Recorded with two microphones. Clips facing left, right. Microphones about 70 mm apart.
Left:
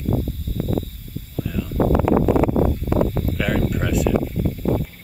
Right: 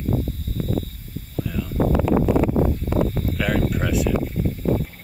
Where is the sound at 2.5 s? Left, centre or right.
Left.